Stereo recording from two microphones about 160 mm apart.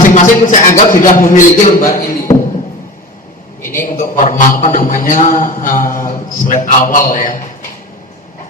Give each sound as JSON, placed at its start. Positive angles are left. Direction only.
{"t": 0.0, "sound": "a man's voice", "side_deg": 55}
{"t": 1.9, "sound": "a sound", "side_deg": 60}
{"t": 3.8, "sound": "a man's voice", "side_deg": 55}